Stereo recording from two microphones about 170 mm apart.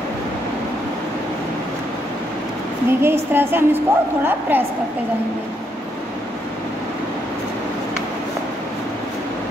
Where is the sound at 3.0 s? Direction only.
15° right (ahead or behind).